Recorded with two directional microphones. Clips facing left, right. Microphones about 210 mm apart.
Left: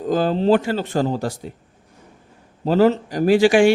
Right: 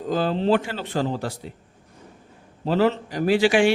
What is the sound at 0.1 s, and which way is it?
Speech, 45° left (ahead or behind).